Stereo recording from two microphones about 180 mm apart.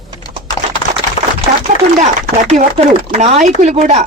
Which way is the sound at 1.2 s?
35° left (ahead or behind).